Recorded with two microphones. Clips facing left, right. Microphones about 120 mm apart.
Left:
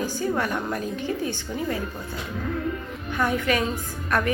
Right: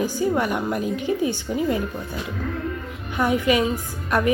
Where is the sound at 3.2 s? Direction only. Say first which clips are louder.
Right 4 dB; 15° right (ahead or behind).